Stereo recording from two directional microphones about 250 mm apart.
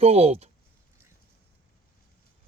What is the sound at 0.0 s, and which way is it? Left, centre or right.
Speech, right.